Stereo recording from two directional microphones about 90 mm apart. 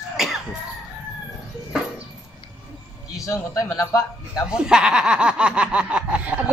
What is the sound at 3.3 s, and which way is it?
A man's voice, 40° left (ahead or behind).